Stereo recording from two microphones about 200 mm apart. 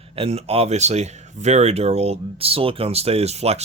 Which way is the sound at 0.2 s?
30° right (ahead or behind).